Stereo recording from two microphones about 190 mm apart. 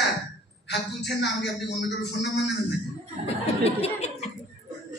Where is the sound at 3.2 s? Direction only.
35° left (ahead or behind).